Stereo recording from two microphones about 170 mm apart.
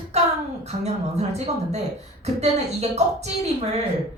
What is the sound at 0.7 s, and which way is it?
A woman's voice, 40° right (ahead or behind).